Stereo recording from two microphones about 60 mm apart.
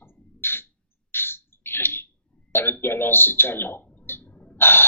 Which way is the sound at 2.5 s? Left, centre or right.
Left.